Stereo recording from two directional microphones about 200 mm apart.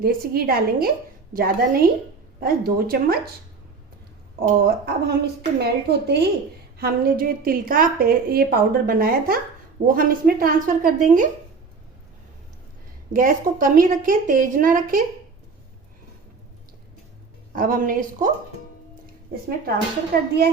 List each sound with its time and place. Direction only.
0.0 s a woman's voice: 50° right (ahead or behind)
4.4 s a woman's voice: 55° right (ahead or behind)
13.1 s a woman's voice: 45° right (ahead or behind)
17.5 s a woman's voice: 45° right (ahead or behind)
19.3 s a woman's voice: 50° right (ahead or behind)